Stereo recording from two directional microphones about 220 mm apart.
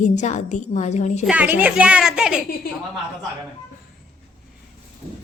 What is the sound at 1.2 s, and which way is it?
A woman's voice, 5° right (ahead or behind).